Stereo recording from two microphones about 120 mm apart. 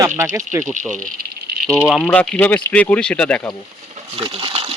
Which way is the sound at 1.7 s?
Centre (ahead or behind).